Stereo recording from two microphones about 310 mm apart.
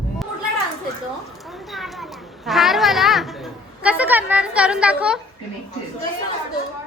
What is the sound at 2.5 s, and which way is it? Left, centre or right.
A woman's voice, centre.